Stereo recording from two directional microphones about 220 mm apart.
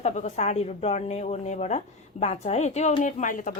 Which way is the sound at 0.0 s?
30° left (ahead or behind).